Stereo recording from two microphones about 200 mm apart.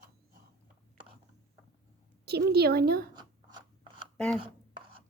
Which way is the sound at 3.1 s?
20° right (ahead or behind).